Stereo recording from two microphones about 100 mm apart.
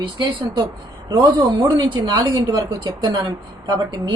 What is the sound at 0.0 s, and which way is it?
A woman's voice, 50° right (ahead or behind).